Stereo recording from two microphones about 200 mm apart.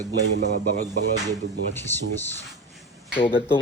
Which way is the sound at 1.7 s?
10° left (ahead or behind).